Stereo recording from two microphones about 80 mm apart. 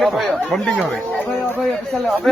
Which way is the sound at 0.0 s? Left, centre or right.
Centre.